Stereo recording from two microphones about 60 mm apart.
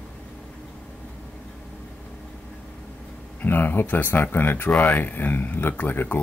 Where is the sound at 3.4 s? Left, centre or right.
Left.